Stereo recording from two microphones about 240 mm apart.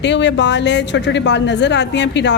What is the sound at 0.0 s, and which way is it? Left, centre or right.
A woman's voice, left.